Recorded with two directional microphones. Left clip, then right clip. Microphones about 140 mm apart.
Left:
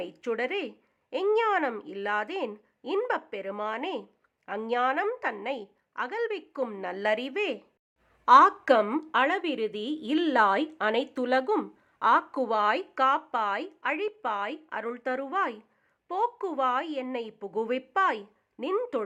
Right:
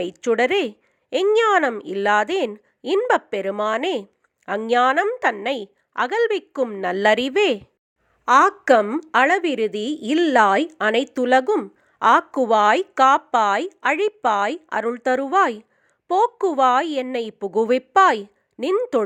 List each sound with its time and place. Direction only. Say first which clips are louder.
0.0 s speech: right 11 dB; 40° right (ahead or behind)
8.2 s a woman's voice: right 3 dB; 25° right (ahead or behind); by 18.3 s 40° right (ahead or behind)
18.6 s a woman's voice: right 9 dB; 20° right (ahead or behind)